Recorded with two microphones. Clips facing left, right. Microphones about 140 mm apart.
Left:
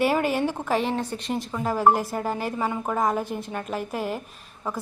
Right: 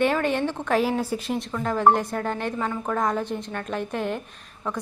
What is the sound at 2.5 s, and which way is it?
A woman's voice, 15° left (ahead or behind).